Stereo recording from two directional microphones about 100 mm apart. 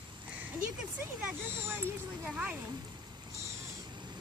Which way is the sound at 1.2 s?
20° right (ahead or behind).